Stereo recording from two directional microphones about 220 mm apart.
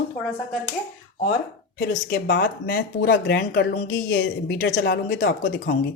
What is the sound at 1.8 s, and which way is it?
Speech, 45° left (ahead or behind).